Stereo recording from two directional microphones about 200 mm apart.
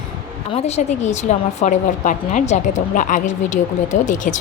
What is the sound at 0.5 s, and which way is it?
A woman's voice, 35° left (ahead or behind).